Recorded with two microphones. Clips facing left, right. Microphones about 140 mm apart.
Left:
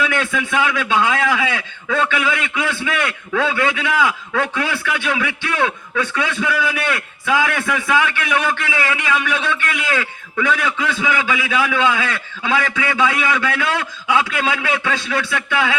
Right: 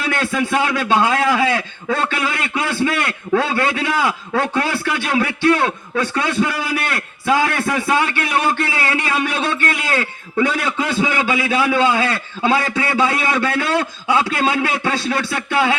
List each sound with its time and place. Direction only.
0.0 s a man's voice: 35° right (ahead or behind)